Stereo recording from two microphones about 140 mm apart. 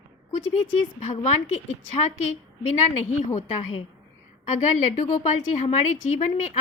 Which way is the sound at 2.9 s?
60° left (ahead or behind).